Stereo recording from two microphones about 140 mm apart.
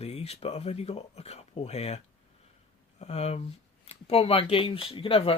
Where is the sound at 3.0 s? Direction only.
45° left (ahead or behind).